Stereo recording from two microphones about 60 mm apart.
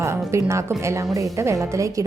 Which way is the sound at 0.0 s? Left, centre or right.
Right.